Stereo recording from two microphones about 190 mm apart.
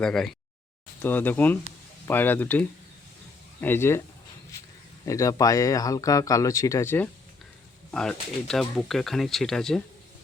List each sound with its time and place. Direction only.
0.0 s speech: 5° left (ahead or behind)
5.0 s speech: 15° left (ahead or behind)